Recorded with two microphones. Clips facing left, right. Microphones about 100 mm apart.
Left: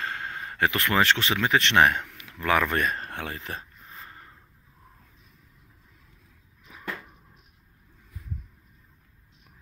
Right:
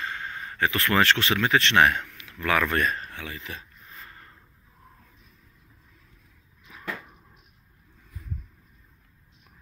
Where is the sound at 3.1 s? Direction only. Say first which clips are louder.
Left 3 dB; 50° left (ahead or behind).